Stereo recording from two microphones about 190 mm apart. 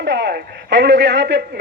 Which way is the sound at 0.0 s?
60° right (ahead or behind).